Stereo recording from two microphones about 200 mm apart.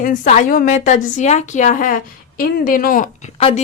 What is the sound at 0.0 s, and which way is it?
A woman's voice, 40° left (ahead or behind).